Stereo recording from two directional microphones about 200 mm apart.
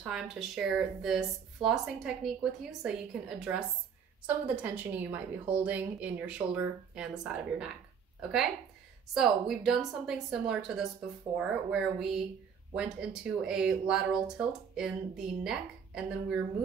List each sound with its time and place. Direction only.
0.0 s speech: centre (ahead or behind)